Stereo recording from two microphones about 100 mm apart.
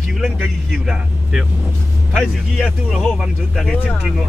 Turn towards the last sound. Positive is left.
turn(degrees=0)  # may be behind; listen again after turning